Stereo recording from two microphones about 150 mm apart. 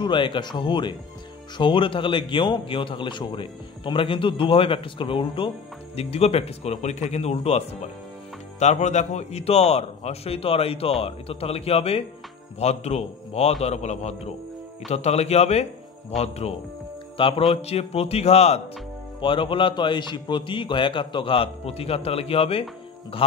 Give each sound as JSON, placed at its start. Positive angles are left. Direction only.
{"t": 0.0, "sound": "a man's voice", "side_deg": 35}
{"t": 19.2, "sound": "a man's voice", "side_deg": 35}